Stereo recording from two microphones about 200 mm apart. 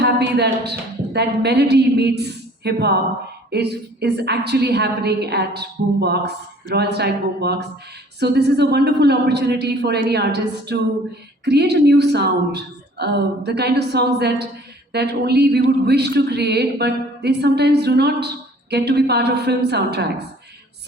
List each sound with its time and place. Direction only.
0.0 s a woman's voice: 55° right (ahead or behind)